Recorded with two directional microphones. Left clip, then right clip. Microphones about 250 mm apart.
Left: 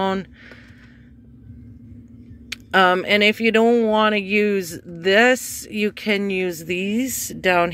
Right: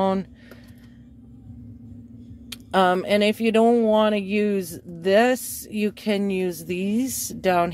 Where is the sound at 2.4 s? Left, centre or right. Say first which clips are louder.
Left 4 dB; centre.